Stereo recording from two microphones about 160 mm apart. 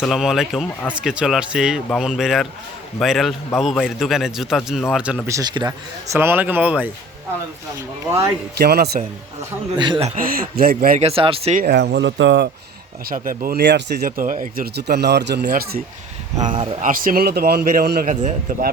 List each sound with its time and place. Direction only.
0.0 s a man's voice: centre (ahead or behind)
5.3 s a man's voice: 25° right (ahead or behind)
6.1 s speech: 10° right (ahead or behind)
8.5 s speech: 80° right
9.7 s a man's voice: 30° right (ahead or behind)
10.2 s speech: 65° right (ahead or behind)
11.0 s speech: 35° right (ahead or behind)
11.5 s speech: 80° right
13.1 s speech: 60° right (ahead or behind)
16.4 s speech: 30° right (ahead or behind)
16.8 s speech: 60° right (ahead or behind)
18.1 s speech: 50° right (ahead or behind)